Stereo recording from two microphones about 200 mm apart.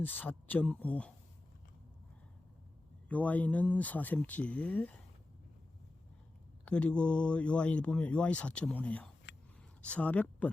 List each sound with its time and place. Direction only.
0.0 s speech: 10° left (ahead or behind)
3.1 s speech: 5° left (ahead or behind)
6.7 s speech: 5° left (ahead or behind)
9.3 s a sound: 60° left (ahead or behind)
9.8 s speech: 5° left (ahead or behind)